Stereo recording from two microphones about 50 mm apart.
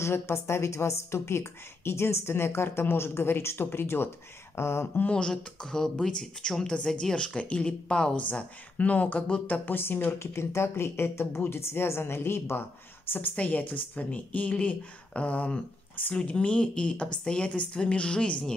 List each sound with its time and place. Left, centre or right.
0.0 s a woman's voice: left
5.1 s a woman's voice: centre
8.3 s speech: left
9.8 s speech: left
10.1 s a woman's voice: left
13.4 s a woman's voice: left